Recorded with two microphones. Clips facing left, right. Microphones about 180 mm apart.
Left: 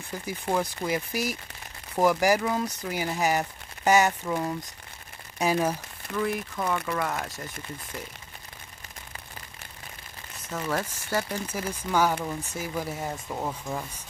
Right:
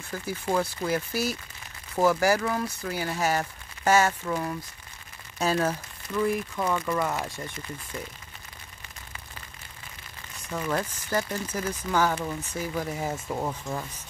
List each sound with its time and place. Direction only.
0.1 s speech: 15° left (ahead or behind)
6.1 s speech: centre (ahead or behind)
10.5 s speech: 5° left (ahead or behind)